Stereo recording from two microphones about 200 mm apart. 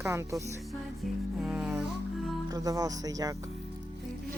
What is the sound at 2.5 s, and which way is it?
Speech, 20° right (ahead or behind).